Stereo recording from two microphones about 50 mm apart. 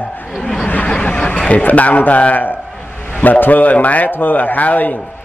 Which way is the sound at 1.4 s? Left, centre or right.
Left.